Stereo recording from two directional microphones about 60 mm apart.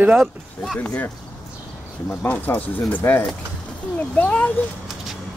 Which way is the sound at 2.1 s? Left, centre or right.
Left.